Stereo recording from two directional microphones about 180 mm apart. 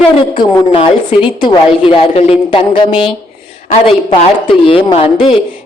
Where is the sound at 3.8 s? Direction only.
30° left (ahead or behind).